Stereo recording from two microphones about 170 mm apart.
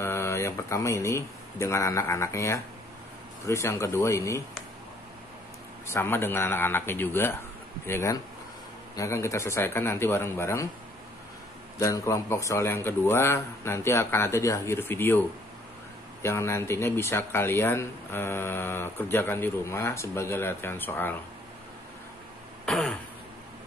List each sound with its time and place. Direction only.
0.0 s speech: 15° left (ahead or behind)
5.9 s speech: 15° left (ahead or behind)
11.8 s speech: 15° left (ahead or behind)
22.7 s throat clearing: centre (ahead or behind)